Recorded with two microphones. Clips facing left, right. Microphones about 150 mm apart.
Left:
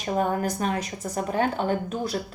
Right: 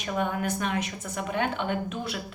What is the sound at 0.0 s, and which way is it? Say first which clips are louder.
A woman's voice: left 4 dB; 35° left (ahead or behind).